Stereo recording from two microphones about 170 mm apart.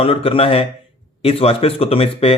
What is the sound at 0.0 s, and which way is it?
Speech, 35° left (ahead or behind).